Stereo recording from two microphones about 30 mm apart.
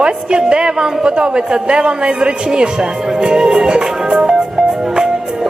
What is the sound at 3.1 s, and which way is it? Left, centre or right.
Music, right.